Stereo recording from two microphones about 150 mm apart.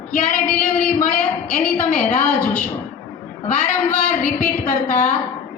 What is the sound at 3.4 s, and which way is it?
A woman's voice, 50° left (ahead or behind).